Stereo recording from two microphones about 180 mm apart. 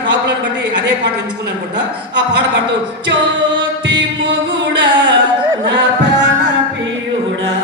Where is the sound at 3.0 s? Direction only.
90° right.